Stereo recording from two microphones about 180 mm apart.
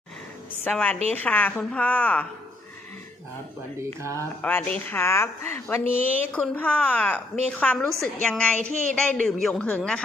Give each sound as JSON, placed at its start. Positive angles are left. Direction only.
{"t": 0.6, "sound": "speech", "side_deg": 10}
{"t": 3.8, "sound": "speech", "side_deg": -15}
{"t": 4.4, "sound": "a man's voice", "side_deg": 10}